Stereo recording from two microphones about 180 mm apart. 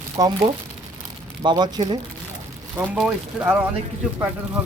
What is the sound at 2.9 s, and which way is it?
Speech, 5° right (ahead or behind).